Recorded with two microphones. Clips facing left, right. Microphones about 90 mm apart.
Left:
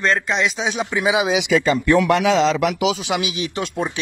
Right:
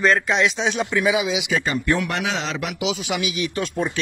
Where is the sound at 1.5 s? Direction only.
90° left.